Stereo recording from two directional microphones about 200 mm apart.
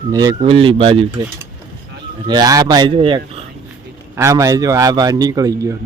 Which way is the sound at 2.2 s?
20° right (ahead or behind).